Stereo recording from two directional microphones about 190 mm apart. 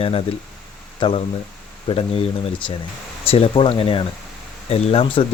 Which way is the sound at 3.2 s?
30° left (ahead or behind).